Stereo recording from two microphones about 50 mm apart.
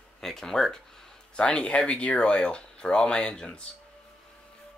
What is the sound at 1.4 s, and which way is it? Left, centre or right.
Speech, left.